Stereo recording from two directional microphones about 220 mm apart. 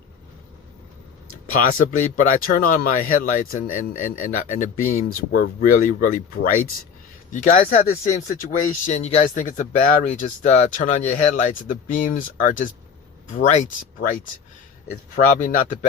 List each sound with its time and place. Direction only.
2.1 s speech: 35° left (ahead or behind)